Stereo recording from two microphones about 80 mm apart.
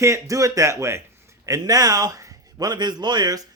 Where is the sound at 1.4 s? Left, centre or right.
Right.